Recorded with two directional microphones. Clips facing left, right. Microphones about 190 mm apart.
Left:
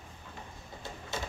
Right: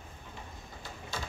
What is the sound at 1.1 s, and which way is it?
Typing, 25° left (ahead or behind).